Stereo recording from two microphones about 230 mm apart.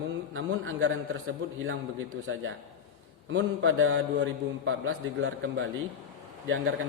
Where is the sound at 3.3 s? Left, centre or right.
Right.